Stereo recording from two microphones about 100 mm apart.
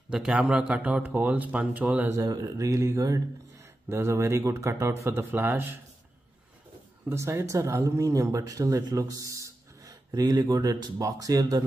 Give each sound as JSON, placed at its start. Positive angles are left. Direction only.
{"t": 0.1, "sound": "a man's voice", "side_deg": -10}
{"t": 2.0, "sound": "speech", "side_deg": -35}
{"t": 7.1, "sound": "speech", "side_deg": -30}